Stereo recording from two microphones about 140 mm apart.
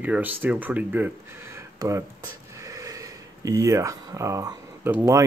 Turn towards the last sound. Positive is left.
turn(degrees=-20)  # may be behind; listen again after turning